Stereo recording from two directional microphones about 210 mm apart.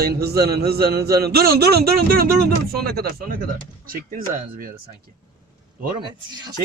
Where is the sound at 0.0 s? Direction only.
50° right (ahead or behind).